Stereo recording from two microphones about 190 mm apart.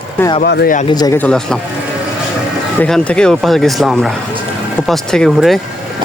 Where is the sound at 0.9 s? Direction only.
20° left (ahead or behind).